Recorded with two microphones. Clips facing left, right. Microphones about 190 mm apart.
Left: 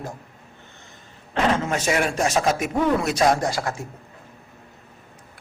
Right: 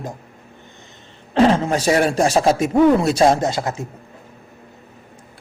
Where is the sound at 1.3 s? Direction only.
30° right (ahead or behind).